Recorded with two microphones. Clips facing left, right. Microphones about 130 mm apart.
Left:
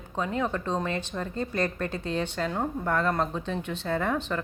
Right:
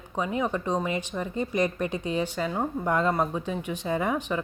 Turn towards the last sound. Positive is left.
turn(degrees=-10)  # may be behind; listen again after turning